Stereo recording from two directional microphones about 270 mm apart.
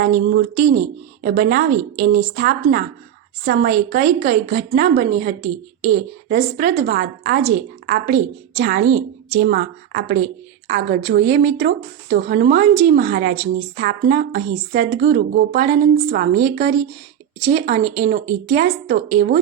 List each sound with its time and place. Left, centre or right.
0.0 s speech: right